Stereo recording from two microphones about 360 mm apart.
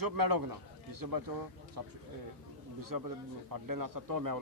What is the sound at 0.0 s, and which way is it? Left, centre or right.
A man's voice, right.